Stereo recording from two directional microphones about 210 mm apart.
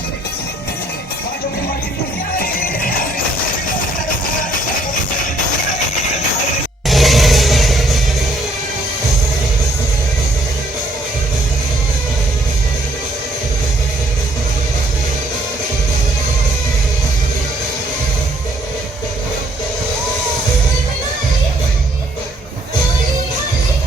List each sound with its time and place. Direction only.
2.4 s music: 45° left (ahead or behind)
6.8 s music: centre (ahead or behind)